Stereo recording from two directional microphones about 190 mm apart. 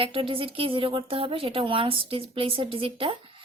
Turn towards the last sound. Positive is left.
turn(degrees=-30)  # may be behind; listen again after turning